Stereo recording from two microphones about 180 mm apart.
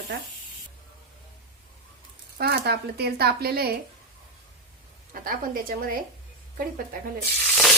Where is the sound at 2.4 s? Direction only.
60° right (ahead or behind).